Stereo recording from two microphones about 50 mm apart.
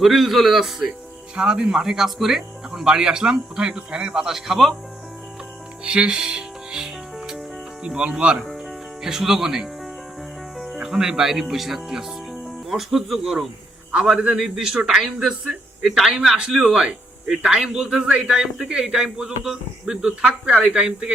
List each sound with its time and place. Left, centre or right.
0.0 s a man's voice: centre
1.4 s speech: centre
5.8 s music: right
7.9 s speech: centre